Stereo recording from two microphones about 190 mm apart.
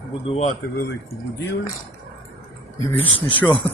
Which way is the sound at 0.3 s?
35° left (ahead or behind).